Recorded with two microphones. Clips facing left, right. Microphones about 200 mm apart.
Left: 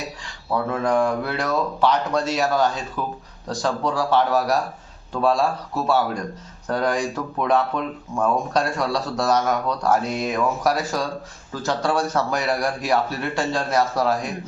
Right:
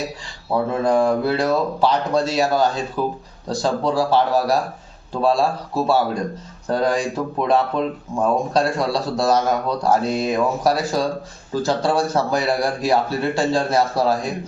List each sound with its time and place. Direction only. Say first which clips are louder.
0.5 s speech: right 3 dB; 30° right (ahead or behind)